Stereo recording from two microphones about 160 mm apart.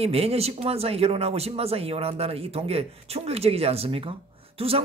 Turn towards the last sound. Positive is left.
turn(degrees=-35)  # may be behind; listen again after turning